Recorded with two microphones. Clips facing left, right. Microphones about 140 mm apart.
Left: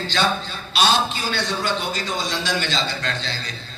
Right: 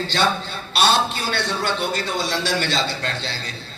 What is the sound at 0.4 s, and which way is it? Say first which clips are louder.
A man's voice: right 1 dB; 60° right (ahead or behind).